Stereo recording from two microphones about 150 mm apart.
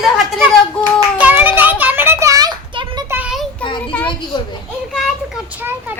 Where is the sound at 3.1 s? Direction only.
10° right (ahead or behind).